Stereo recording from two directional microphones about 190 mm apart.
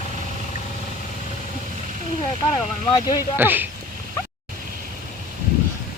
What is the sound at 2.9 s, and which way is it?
Speech, 20° left (ahead or behind).